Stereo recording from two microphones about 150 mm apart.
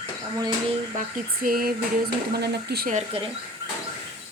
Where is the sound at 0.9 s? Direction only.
65° right (ahead or behind); by 2.9 s 90° right.